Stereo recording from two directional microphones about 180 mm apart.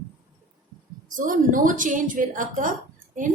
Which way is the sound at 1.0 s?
45° right (ahead or behind).